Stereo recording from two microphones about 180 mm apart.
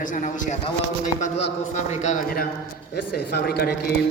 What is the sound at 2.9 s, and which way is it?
Speech, 60° left (ahead or behind).